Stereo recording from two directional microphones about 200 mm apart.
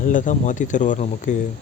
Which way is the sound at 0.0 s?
40° left (ahead or behind).